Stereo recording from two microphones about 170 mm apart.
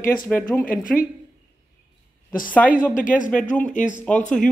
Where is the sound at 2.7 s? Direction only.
50° left (ahead or behind).